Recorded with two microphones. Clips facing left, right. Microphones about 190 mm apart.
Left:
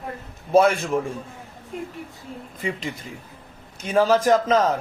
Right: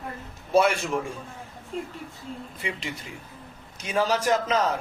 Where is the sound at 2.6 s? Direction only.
45° left (ahead or behind).